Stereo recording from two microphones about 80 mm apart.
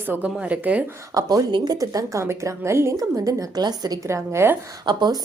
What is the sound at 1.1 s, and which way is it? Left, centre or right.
A woman's voice, right.